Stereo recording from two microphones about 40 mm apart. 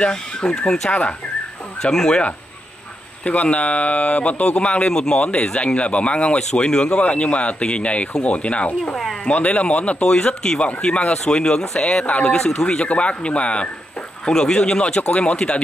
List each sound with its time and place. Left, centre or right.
0.0 s speech: left
1.8 s speech: centre
3.3 s speech: left
7.0 s speech: left
8.9 s speech: centre
9.2 s speech: left
10.0 s speech: centre
12.8 s speech: left
14.2 s speech: centre